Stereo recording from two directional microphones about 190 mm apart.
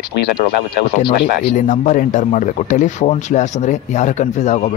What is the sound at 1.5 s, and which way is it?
A man's voice, 40° left (ahead or behind).